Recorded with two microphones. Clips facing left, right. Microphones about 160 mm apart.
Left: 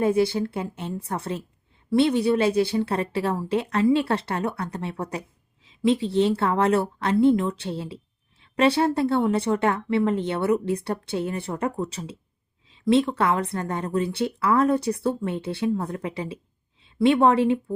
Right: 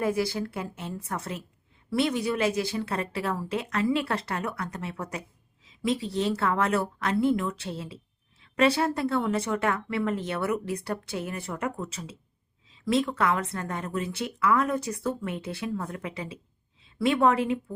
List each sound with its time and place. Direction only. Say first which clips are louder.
0.0 s a woman's voice: left 6 dB; 25° left (ahead or behind)